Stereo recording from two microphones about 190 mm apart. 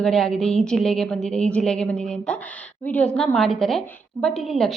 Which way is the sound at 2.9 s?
5° left (ahead or behind).